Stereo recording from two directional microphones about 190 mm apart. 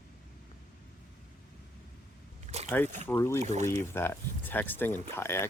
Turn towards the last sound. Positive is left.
turn(degrees=15)  # may be behind; listen again after turning